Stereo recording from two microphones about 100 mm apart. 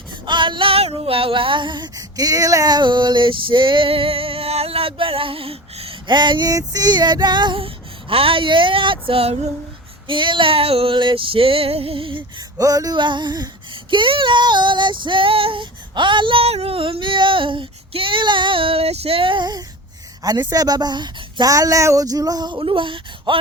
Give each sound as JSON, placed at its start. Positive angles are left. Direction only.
{"t": 0.1, "sound": "female singing", "side_deg": -50}
{"t": 2.0, "sound": "female singing", "side_deg": -40}
{"t": 6.1, "sound": "a woman's voice", "side_deg": -50}
{"t": 6.5, "sound": "a woman's voice", "side_deg": -40}
{"t": 7.6, "sound": "female singing", "side_deg": -65}
{"t": 10.1, "sound": "female singing", "side_deg": -55}
{"t": 12.5, "sound": "a woman's voice", "side_deg": -35}
{"t": 13.9, "sound": "female singing", "side_deg": -55}
{"t": 20.2, "sound": "a woman's voice", "side_deg": -45}
{"t": 21.5, "sound": "a sound", "side_deg": -35}